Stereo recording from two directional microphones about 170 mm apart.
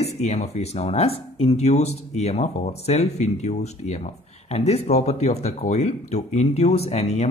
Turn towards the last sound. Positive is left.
turn(degrees=40)  # may be behind; listen again after turning